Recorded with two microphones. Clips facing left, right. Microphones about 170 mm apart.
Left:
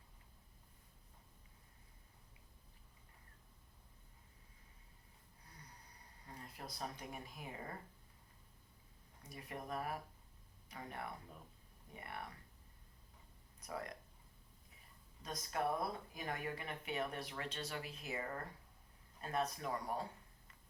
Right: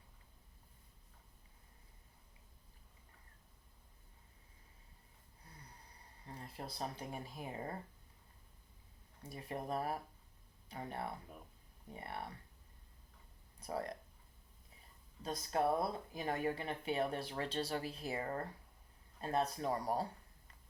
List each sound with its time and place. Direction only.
6.2 s speech: 30° right (ahead or behind)
9.2 s speech: 30° right (ahead or behind)
13.6 s speech: 30° right (ahead or behind)
15.2 s speech: 30° right (ahead or behind)